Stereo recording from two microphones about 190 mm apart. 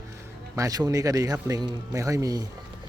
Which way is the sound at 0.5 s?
20° right (ahead or behind).